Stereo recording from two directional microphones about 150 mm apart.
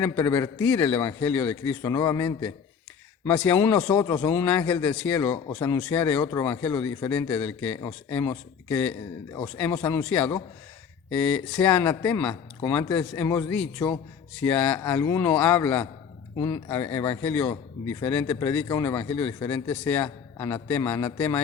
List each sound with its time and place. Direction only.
0.0 s a man's voice: 10° left (ahead or behind)
3.2 s a man's voice: 10° left (ahead or behind)
4.0 s a man's voice: 20° left (ahead or behind)
16.4 s speech: 25° left (ahead or behind)
16.7 s a man's voice: 15° left (ahead or behind)